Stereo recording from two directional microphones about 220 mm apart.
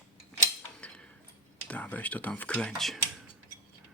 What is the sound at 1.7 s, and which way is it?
Speech, 5° left (ahead or behind).